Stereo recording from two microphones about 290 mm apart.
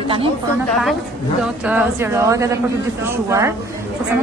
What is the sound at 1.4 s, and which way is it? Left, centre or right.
Speech, centre.